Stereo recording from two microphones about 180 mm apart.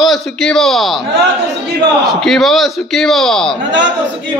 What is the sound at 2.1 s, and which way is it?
A man's voice, centre (ahead or behind).